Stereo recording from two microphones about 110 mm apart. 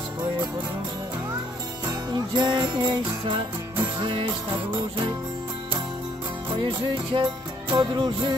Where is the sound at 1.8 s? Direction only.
40° right (ahead or behind).